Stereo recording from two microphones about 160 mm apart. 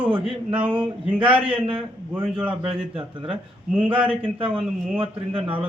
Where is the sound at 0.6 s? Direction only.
35° right (ahead or behind).